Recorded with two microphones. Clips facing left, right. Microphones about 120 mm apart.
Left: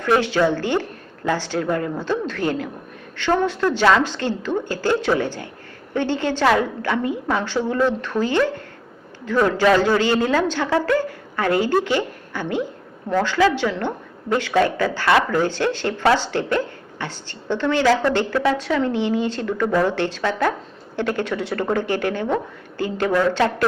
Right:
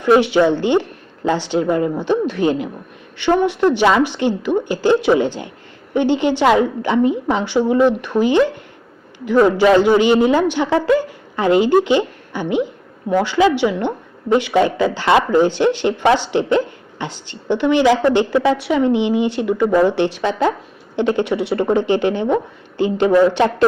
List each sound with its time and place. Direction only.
0.0 s a woman's voice: 15° right (ahead or behind)